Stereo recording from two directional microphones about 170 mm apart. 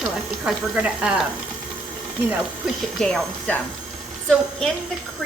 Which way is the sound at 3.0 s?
5° left (ahead or behind).